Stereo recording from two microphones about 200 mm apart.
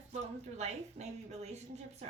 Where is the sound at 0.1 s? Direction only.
35° right (ahead or behind).